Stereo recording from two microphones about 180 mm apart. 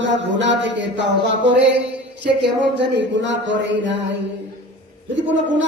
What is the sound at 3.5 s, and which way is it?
Speech, 80° right.